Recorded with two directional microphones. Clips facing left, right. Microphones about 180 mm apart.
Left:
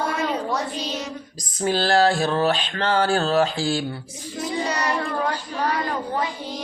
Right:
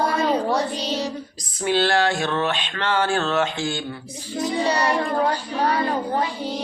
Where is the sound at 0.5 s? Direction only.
30° right (ahead or behind).